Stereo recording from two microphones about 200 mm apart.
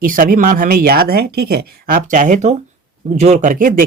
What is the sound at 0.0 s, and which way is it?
Speech, 45° right (ahead or behind).